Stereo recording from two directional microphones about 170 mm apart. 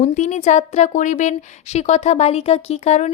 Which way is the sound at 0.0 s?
45° left (ahead or behind).